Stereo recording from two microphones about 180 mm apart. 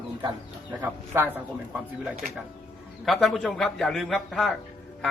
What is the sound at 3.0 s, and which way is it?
A man's voice, centre (ahead or behind).